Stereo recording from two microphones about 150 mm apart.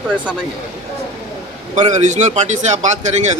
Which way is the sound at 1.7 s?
50° right (ahead or behind).